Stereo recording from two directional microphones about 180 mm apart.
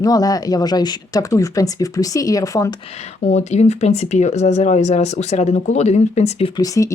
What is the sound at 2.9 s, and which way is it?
Speech, 35° left (ahead or behind).